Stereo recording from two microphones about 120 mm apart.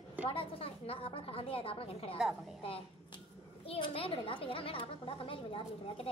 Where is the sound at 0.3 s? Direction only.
50° left (ahead or behind).